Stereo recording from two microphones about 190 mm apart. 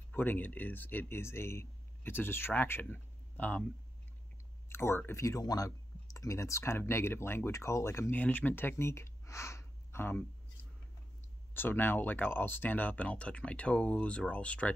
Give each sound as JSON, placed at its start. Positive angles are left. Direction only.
{"t": 0.1, "sound": "speech", "side_deg": 10}
{"t": 4.6, "sound": "speech", "side_deg": 10}
{"t": 11.5, "sound": "speech", "side_deg": 10}